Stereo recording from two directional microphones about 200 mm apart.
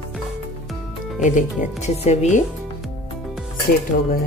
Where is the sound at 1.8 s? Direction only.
35° left (ahead or behind).